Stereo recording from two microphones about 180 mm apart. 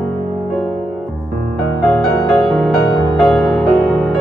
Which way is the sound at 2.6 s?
Centre (ahead or behind).